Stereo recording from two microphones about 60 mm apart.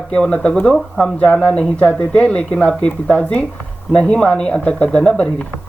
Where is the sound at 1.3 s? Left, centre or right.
Centre.